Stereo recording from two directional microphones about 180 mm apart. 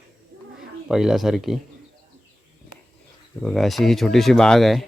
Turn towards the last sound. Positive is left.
turn(degrees=0)  # may be behind; listen again after turning